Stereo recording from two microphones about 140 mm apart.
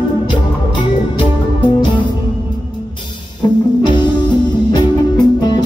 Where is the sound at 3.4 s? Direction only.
35° left (ahead or behind).